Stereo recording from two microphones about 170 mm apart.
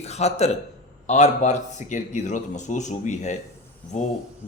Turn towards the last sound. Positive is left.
turn(degrees=45)  # may be behind; listen again after turning